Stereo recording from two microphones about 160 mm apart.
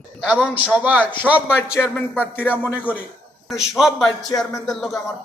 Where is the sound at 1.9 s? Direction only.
10° left (ahead or behind).